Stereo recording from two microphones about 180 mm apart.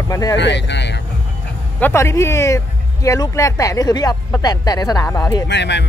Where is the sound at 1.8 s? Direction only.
15° left (ahead or behind).